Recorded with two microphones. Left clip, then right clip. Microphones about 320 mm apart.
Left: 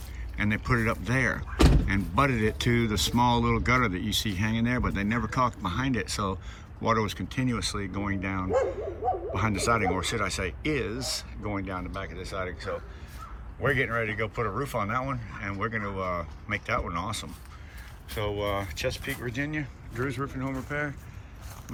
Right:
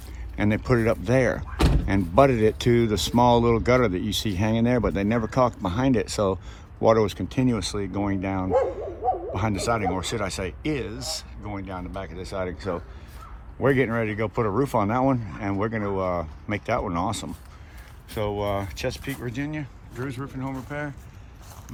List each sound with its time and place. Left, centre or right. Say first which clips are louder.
0.3 s speech: right 4 dB; centre